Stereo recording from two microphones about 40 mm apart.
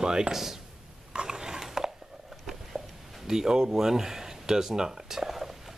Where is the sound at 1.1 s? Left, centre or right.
Centre.